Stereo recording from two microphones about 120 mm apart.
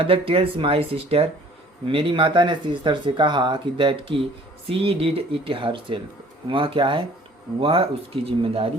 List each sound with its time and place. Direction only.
0.0 s speech: 50° right (ahead or behind)